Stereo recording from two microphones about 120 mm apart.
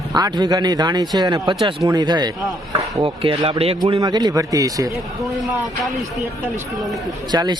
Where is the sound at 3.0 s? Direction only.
45° right (ahead or behind).